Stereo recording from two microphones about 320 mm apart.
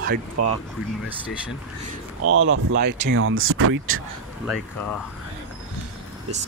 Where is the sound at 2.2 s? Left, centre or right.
Right.